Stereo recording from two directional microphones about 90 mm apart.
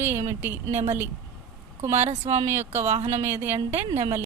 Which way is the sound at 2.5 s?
25° right (ahead or behind).